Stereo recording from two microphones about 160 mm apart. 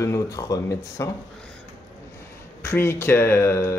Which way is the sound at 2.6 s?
15° left (ahead or behind).